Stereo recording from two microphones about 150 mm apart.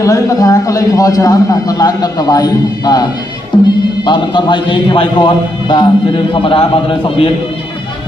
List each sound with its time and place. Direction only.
0.0 s a man's voice: 20° left (ahead or behind)